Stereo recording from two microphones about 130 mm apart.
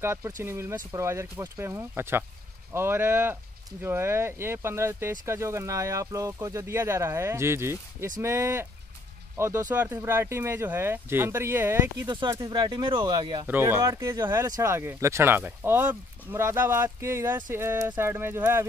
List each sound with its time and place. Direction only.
0.0 s speech: 20° right (ahead or behind)
12.1 s speech: 35° right (ahead or behind)
13.5 s speech: 15° right (ahead or behind)